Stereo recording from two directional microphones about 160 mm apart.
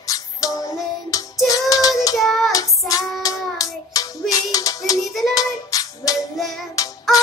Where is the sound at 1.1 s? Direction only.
20° left (ahead or behind).